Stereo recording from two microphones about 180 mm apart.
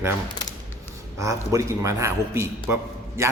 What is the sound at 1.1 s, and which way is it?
A man's voice, 15° right (ahead or behind).